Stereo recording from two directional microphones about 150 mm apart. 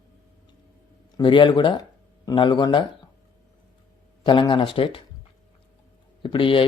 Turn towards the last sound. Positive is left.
turn(degrees=35)  # may be behind; listen again after turning